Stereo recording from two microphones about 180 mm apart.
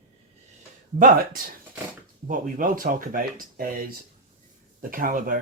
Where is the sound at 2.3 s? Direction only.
50° right (ahead or behind).